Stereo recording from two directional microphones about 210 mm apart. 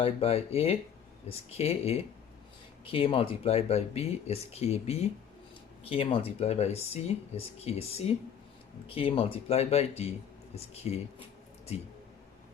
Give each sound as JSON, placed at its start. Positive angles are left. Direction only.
{"t": 0.0, "sound": "speech", "side_deg": 30}